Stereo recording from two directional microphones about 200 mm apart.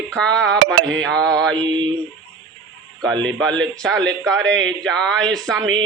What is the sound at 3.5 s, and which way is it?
Speech, 65° right (ahead or behind).